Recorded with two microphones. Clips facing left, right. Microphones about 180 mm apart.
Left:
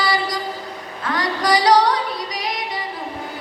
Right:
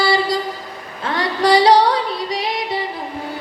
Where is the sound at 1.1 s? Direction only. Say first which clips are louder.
Right 4 dB; 25° right (ahead or behind).